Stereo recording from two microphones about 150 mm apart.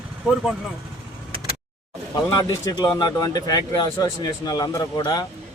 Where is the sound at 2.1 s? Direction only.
25° left (ahead or behind).